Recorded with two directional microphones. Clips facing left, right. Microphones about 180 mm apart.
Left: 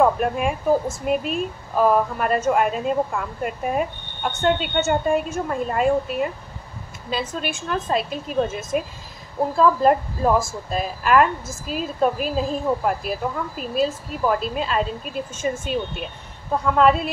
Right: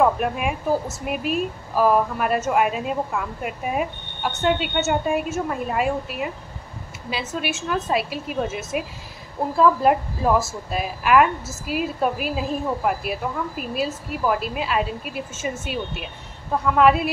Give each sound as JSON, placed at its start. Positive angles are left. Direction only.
{"t": 0.0, "sound": "speech", "side_deg": -5}